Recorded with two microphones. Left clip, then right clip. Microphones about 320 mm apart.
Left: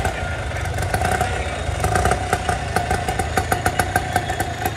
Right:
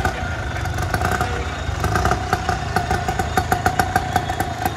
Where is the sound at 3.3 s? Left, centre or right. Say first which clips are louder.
Right 2 dB; centre.